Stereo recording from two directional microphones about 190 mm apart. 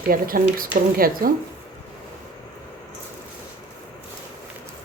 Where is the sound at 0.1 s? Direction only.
50° right (ahead or behind).